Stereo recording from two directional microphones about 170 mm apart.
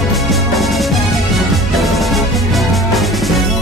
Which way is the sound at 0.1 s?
Centre (ahead or behind).